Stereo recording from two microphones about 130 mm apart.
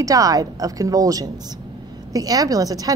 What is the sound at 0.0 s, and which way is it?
A woman's voice, 25° right (ahead or behind).